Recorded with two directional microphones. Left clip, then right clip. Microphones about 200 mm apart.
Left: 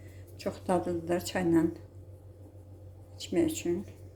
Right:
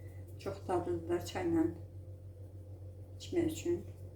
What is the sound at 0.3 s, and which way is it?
A woman's voice, 55° left (ahead or behind).